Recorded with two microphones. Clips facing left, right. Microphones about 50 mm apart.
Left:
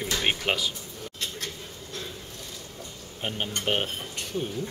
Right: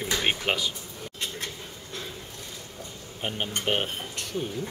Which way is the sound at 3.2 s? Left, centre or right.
Centre.